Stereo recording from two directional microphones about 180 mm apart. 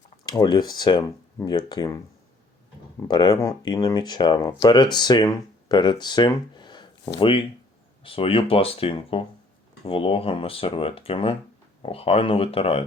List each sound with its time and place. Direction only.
0.3 s speech: 20° left (ahead or behind)
3.1 s speech: 25° left (ahead or behind)